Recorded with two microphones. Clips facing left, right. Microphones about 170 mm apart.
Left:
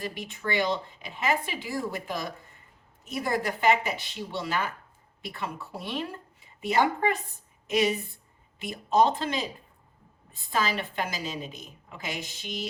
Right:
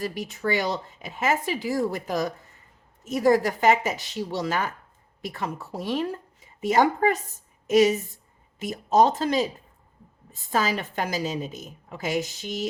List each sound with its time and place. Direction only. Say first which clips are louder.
0.0 s a woman's voice: right 6 dB; 40° right (ahead or behind)